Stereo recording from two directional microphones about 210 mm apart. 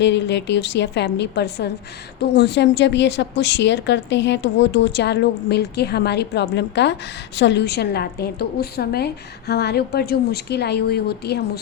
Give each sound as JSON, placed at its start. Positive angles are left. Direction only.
{"t": 0.0, "sound": "a woman's voice", "side_deg": 55}